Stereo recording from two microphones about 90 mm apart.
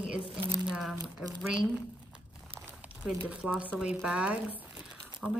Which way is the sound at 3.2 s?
15° right (ahead or behind).